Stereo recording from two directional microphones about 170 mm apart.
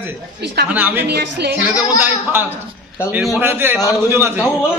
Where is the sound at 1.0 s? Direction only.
75° right (ahead or behind).